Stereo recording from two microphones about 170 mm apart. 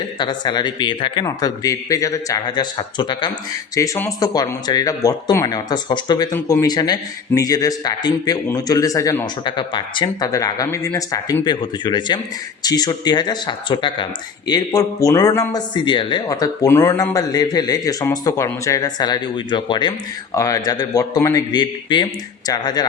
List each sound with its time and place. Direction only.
0.2 s speech: 25° left (ahead or behind)
3.8 s speech: 15° left (ahead or behind)